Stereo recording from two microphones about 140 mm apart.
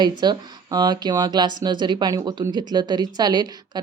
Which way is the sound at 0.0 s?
30° right (ahead or behind).